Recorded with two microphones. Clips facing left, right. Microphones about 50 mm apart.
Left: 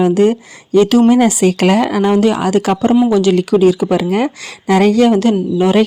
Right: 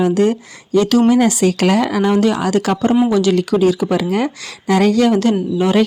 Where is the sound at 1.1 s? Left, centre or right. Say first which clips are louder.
Left 2 dB; left.